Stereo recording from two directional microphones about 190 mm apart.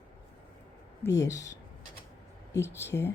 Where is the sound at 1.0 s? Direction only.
15° left (ahead or behind).